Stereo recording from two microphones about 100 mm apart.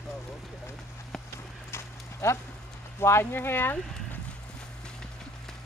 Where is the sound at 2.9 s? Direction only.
25° left (ahead or behind).